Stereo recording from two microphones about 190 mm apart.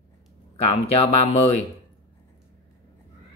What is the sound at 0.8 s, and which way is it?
Speech, 30° left (ahead or behind).